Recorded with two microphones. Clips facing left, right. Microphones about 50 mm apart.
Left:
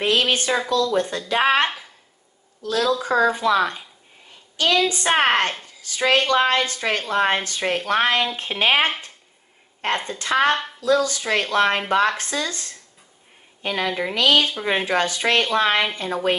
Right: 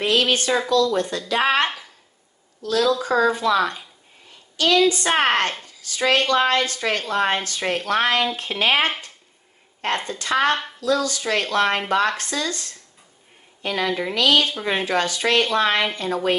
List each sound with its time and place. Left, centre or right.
0.0 s a woman's voice: left
10.0 s a woman's voice: left
14.5 s speech: centre
14.9 s a woman's voice: left